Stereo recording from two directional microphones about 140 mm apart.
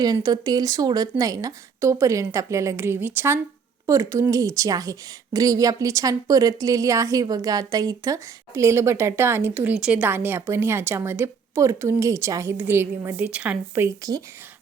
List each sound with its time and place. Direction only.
0.0 s a woman's voice: 25° right (ahead or behind); by 13.8 s 10° right (ahead or behind)
13.8 s a woman's voice: 25° right (ahead or behind)